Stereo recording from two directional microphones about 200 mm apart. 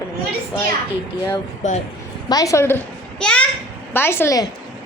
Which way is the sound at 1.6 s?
35° left (ahead or behind).